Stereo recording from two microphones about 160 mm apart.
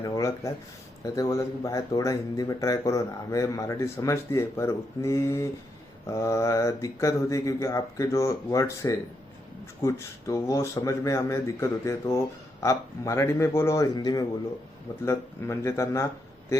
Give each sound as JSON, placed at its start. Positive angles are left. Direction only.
{"t": 0.0, "sound": "speech", "side_deg": 20}